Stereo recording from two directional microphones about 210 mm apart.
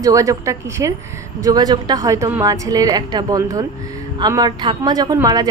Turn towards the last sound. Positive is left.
turn(degrees=-15)  # may be behind; listen again after turning